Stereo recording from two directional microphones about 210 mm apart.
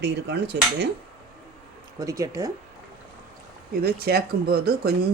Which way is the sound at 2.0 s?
15° right (ahead or behind).